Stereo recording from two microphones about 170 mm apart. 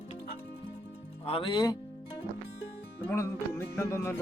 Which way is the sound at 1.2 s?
35° left (ahead or behind).